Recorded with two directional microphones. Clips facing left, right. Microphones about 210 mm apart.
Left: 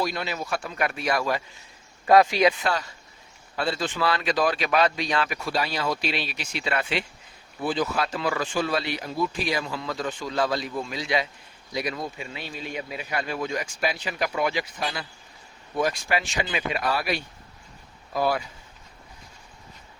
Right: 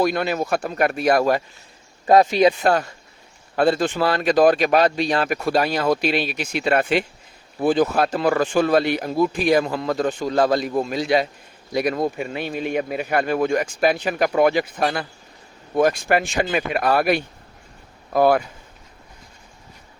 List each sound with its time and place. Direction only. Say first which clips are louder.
0.0 s speech: right 8 dB; 55° right (ahead or behind)
2.0 s speech: right 4 dB; 25° right (ahead or behind)
2.6 s speech: right 8 dB; 50° right (ahead or behind)